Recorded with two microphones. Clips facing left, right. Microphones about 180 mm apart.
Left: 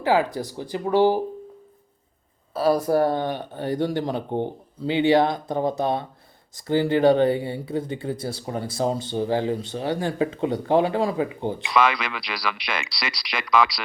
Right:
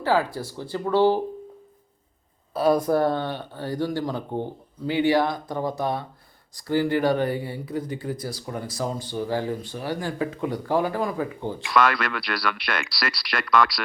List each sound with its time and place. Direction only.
0.0 s speech: 15° left (ahead or behind)
2.5 s speech: 5° left (ahead or behind); by 11.5 s 20° left (ahead or behind)
11.6 s speech: centre (ahead or behind)